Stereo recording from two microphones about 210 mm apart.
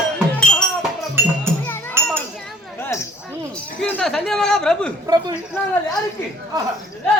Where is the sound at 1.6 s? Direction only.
10° left (ahead or behind).